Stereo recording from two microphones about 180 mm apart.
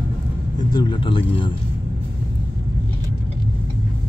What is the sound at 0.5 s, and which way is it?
Speech, 25° left (ahead or behind).